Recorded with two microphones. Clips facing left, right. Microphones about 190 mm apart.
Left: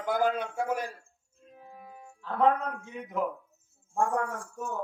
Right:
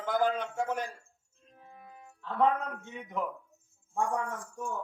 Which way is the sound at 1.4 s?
5° left (ahead or behind).